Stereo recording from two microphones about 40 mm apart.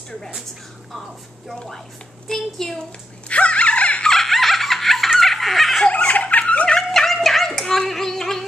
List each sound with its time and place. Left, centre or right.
0.9 s a woman's voice: centre
3.3 s a sound: left
4.1 s giggle: centre
5.9 s snicker: left
6.8 s music: centre
7.5 s a sound: centre